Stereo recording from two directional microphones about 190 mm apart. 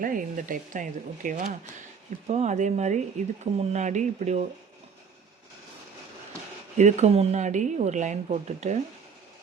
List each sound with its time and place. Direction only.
0.0 s a woman's voice: 45° right (ahead or behind)
6.7 s a woman's voice: 40° right (ahead or behind)